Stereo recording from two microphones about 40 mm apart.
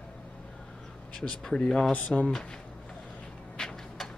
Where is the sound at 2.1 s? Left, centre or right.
Centre.